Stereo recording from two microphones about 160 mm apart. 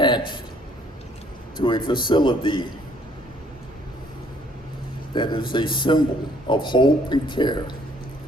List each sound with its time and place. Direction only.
0.0 s a sound: 30° left (ahead or behind)
1.5 s a man's voice: 30° left (ahead or behind)
5.1 s a man's voice: 30° left (ahead or behind)